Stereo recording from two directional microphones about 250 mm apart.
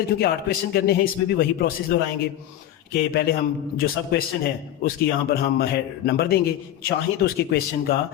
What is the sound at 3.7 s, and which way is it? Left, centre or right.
Speech, left.